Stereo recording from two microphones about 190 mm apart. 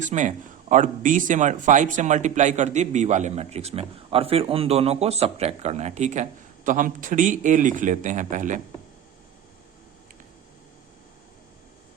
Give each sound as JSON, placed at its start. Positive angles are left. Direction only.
{"t": 0.0, "sound": "speech", "side_deg": -40}